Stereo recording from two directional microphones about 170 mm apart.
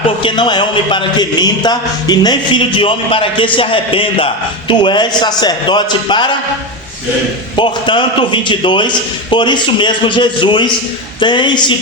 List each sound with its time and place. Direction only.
0.2 s speech: 30° left (ahead or behind)
7.5 s speech: 30° left (ahead or behind)